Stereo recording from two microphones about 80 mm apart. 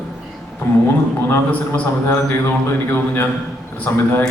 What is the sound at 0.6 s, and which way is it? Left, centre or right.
A man's voice, left.